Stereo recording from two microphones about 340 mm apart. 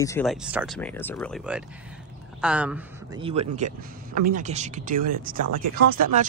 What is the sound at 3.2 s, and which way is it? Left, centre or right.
Speech, centre.